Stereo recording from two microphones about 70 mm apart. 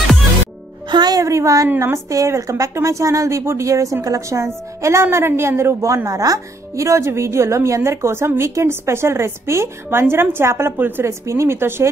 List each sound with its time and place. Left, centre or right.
0.8 s a woman's voice: right
1.2 s a woman's voice: right
6.0 s speech: right